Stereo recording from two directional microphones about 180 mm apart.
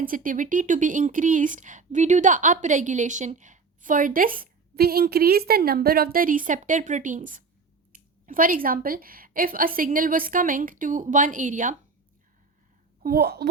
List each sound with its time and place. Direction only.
0.0 s speech: 50° right (ahead or behind)
13.0 s speech: 55° right (ahead or behind)